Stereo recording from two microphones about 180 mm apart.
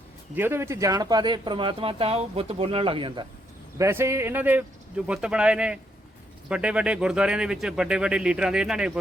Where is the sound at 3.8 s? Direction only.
15° right (ahead or behind).